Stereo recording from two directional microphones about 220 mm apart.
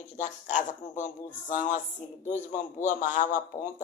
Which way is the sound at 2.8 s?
35° left (ahead or behind).